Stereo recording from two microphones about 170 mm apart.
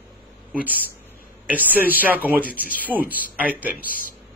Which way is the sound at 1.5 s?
10° right (ahead or behind).